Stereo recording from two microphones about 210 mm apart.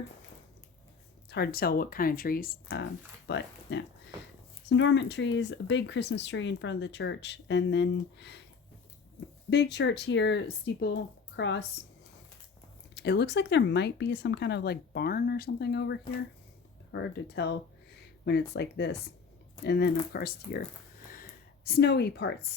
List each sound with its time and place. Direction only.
1.3 s speech: 50° left (ahead or behind)
3.2 s speech: 55° left (ahead or behind)
9.5 s speech: 55° left (ahead or behind)
12.9 s speech: 55° left (ahead or behind)
21.1 s a sound: 45° left (ahead or behind)